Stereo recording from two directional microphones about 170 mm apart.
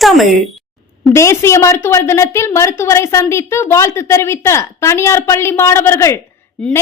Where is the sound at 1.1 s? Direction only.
15° left (ahead or behind).